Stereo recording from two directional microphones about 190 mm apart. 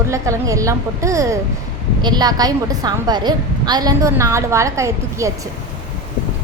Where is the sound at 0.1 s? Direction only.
15° right (ahead or behind).